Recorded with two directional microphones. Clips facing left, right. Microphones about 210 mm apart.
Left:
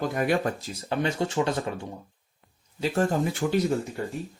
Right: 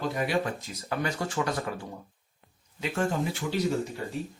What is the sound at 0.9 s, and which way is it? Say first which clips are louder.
Speech: left 4 dB; 25° left (ahead or behind).